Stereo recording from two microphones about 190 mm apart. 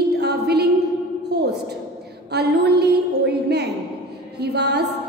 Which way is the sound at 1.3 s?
60° right (ahead or behind).